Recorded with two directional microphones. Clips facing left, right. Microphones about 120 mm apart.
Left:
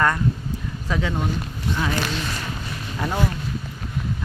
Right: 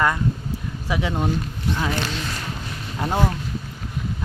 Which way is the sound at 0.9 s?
15° right (ahead or behind).